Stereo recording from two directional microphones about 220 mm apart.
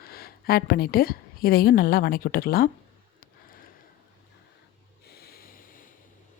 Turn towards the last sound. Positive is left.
turn(degrees=40)  # may be behind; listen again after turning